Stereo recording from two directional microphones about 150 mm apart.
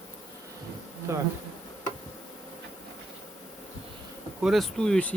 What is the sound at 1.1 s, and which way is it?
Bee, 20° right (ahead or behind).